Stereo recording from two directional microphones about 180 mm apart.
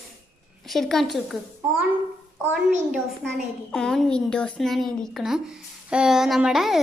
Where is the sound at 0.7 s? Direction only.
Centre (ahead or behind).